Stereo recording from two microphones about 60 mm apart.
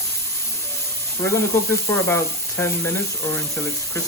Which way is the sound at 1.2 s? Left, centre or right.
Left.